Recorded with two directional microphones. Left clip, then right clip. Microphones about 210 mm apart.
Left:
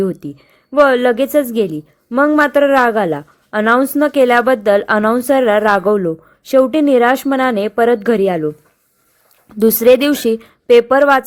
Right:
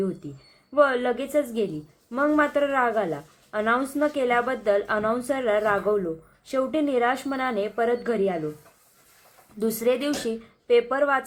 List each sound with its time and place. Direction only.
0.2 s a woman's voice: 45° left (ahead or behind)
9.6 s a woman's voice: 45° left (ahead or behind)